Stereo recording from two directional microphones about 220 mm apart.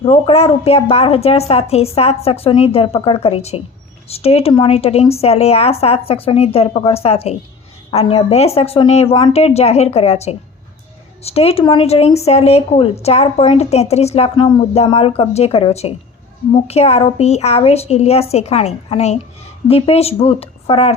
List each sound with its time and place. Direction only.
0.0 s a woman's voice: 25° left (ahead or behind)